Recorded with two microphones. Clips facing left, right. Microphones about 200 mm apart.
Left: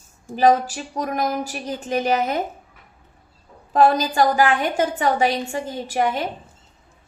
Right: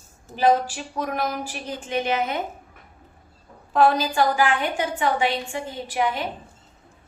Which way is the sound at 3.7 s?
40° left (ahead or behind).